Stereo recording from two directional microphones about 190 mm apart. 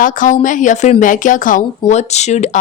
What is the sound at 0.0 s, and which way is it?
A woman's voice, 45° left (ahead or behind).